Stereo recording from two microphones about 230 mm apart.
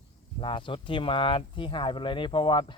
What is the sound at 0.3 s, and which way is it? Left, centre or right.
Speech, left.